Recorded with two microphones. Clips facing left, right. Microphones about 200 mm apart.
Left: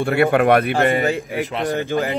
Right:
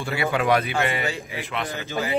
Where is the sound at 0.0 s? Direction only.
55° left (ahead or behind).